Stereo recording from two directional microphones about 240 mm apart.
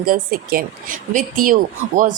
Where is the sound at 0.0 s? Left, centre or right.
Right.